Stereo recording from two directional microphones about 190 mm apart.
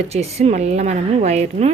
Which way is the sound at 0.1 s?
35° right (ahead or behind).